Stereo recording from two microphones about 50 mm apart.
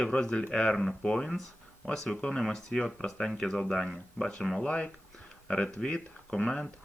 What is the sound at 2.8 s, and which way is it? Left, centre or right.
Speech, centre.